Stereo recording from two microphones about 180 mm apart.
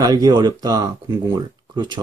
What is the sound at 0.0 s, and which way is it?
Speech, 20° right (ahead or behind).